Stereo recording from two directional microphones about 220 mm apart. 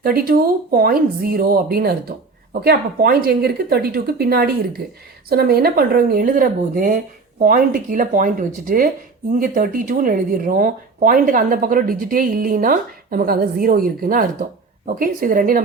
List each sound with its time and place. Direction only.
0.0 s speech: 45° right (ahead or behind)